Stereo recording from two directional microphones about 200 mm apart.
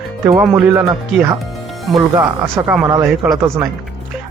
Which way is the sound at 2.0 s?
20° right (ahead or behind).